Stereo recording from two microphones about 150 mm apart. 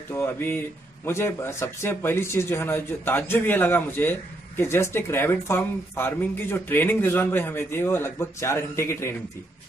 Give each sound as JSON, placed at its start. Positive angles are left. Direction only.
{"t": 0.1, "sound": "speech", "side_deg": 15}